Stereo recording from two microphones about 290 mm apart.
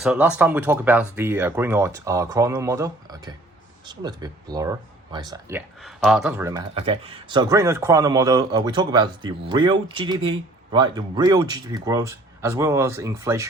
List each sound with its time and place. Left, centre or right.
0.0 s speech: centre